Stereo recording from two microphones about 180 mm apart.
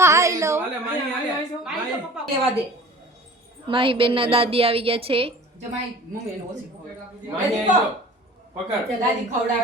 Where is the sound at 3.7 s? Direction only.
30° right (ahead or behind).